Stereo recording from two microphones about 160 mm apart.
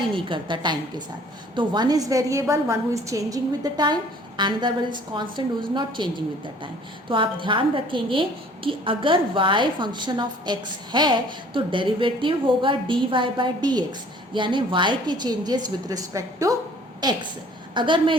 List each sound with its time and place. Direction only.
0.1 s a woman's voice: 30° right (ahead or behind)